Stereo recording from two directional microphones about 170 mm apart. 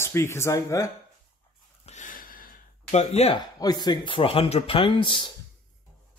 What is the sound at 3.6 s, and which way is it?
Speech, 25° left (ahead or behind).